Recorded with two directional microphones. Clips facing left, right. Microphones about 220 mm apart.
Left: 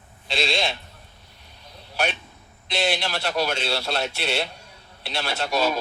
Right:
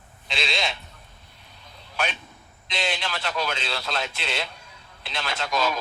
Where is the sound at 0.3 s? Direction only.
35° left (ahead or behind).